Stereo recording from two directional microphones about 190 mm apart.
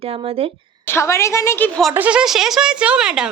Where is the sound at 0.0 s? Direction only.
30° right (ahead or behind).